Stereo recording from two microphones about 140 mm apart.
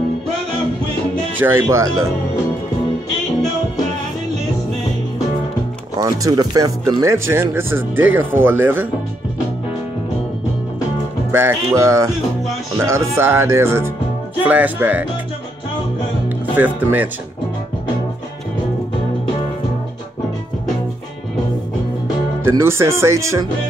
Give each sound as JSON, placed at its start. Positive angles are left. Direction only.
{"t": 1.4, "sound": "speech", "side_deg": -20}
{"t": 5.9, "sound": "speech", "side_deg": -20}
{"t": 11.3, "sound": "speech", "side_deg": -20}
{"t": 16.5, "sound": "speech", "side_deg": -10}
{"t": 22.4, "sound": "speech", "side_deg": -20}